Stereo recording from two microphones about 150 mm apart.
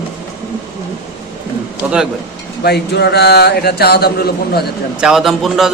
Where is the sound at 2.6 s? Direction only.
90° left.